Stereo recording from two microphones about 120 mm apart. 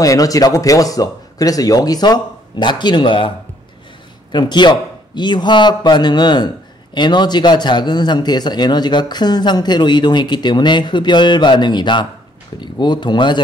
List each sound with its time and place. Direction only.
0.0 s a man's voice: 30° left (ahead or behind)